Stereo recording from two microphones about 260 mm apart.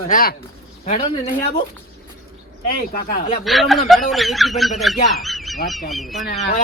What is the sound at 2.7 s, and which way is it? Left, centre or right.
Speech, left.